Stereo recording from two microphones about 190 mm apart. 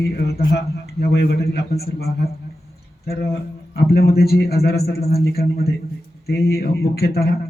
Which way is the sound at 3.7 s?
55° left (ahead or behind).